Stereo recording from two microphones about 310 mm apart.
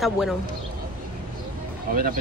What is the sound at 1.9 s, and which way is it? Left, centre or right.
Speech, right.